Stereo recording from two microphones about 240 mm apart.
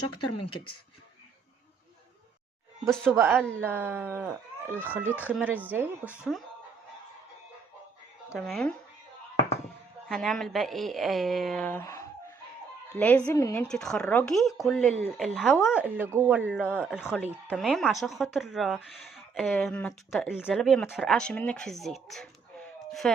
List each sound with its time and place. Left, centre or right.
0.1 s speech: left
2.8 s speech: centre
3.3 s speech: centre
8.3 s speech: centre
10.1 s speech: centre